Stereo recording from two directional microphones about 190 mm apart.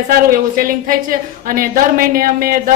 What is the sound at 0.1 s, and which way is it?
A woman's voice, 50° right (ahead or behind).